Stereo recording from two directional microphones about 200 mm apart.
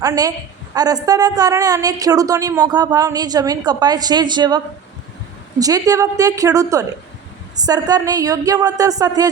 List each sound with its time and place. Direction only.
0.0 s a woman's voice: 20° right (ahead or behind)